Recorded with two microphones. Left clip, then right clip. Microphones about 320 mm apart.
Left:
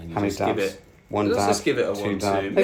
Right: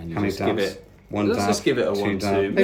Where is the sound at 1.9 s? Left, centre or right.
Centre.